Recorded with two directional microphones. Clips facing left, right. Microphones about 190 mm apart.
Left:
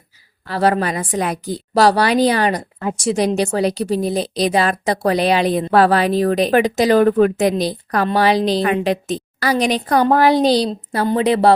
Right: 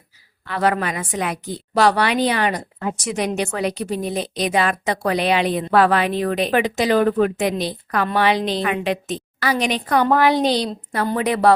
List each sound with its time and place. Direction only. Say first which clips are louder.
0.4 s a woman's voice: left 3 dB; 35° left (ahead or behind)